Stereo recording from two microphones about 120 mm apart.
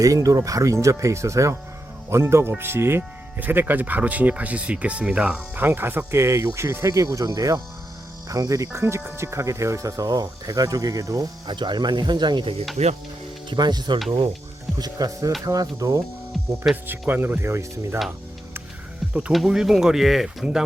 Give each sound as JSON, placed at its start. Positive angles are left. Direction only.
{"t": 0.0, "sound": "speech", "side_deg": -30}
{"t": 12.7, "sound": "speech", "side_deg": -70}
{"t": 13.5, "sound": "speech", "side_deg": -35}
{"t": 16.8, "sound": "speech", "side_deg": -15}
{"t": 19.1, "sound": "speech", "side_deg": -5}